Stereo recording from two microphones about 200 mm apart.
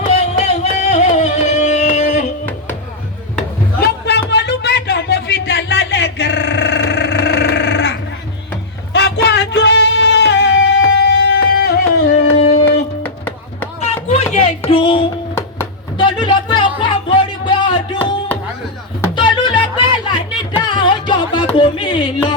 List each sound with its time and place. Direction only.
0.0 s music: 30° left (ahead or behind)
3.8 s a sound: 60° left (ahead or behind)
8.9 s music: 60° left (ahead or behind)
13.0 s music: 10° left (ahead or behind)
13.9 s music: 35° left (ahead or behind)
19.1 s music: 25° left (ahead or behind)